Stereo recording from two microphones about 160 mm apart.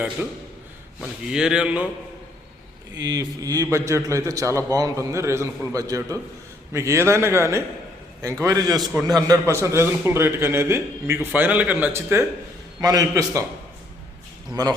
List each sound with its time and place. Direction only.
0.2 s a man's voice: 10° right (ahead or behind)
2.9 s a man's voice: 25° right (ahead or behind)
14.5 s a man's voice: 25° right (ahead or behind)